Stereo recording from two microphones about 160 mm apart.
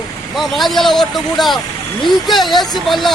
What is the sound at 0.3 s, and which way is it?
Speech, centre (ahead or behind).